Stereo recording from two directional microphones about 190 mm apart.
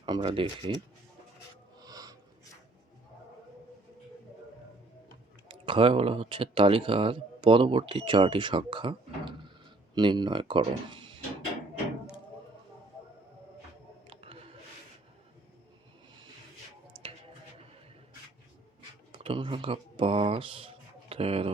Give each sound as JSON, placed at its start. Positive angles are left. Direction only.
{"t": 0.0, "sound": "speech", "side_deg": -25}
{"t": 1.8, "sound": "a sound", "side_deg": -20}
{"t": 5.5, "sound": "speech", "side_deg": -25}
{"t": 14.1, "sound": "a sound", "side_deg": -30}
{"t": 16.9, "sound": "music", "side_deg": -30}
{"t": 19.1, "sound": "speech", "side_deg": -25}